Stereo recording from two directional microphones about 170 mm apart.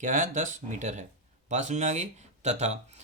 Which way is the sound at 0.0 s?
50° right (ahead or behind).